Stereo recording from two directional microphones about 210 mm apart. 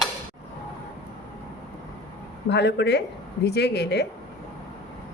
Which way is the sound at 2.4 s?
55° left (ahead or behind).